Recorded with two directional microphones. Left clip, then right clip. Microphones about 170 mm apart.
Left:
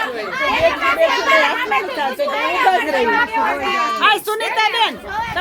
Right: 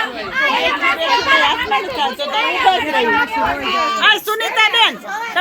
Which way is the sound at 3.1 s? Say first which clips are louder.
Even; 30° right (ahead or behind).